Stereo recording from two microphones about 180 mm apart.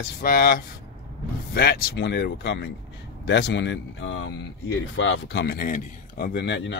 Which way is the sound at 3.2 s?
80° left.